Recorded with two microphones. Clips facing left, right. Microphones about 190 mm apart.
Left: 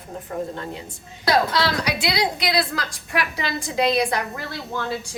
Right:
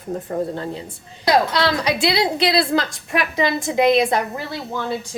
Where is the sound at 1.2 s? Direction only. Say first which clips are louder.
Right 3 dB; 20° right (ahead or behind).